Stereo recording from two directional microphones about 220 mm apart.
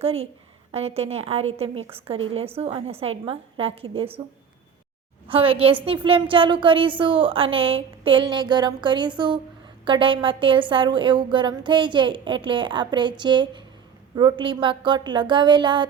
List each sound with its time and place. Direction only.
0.0 s a woman's voice: 25° right (ahead or behind)
5.3 s a woman's voice: 25° right (ahead or behind)